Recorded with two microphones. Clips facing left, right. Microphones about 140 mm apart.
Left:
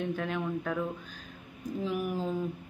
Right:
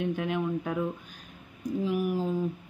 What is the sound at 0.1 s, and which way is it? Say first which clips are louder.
Speech: right 3 dB; 10° right (ahead or behind).